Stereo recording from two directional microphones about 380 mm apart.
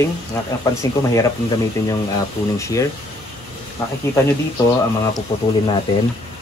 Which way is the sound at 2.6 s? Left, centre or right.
Centre.